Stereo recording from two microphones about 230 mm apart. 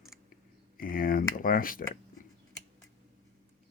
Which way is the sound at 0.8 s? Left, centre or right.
Left.